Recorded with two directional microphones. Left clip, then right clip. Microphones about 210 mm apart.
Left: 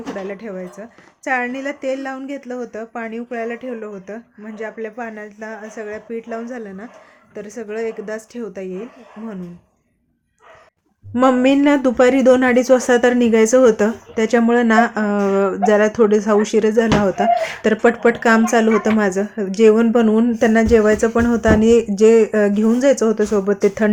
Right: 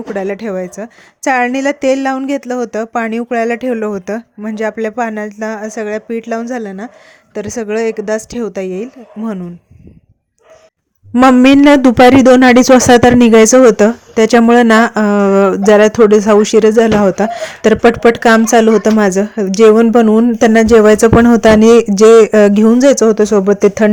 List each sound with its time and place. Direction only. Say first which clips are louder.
0.2 s a woman's voice: right 10 dB; 45° right (ahead or behind)
11.1 s speech: right 7 dB; 40° right (ahead or behind)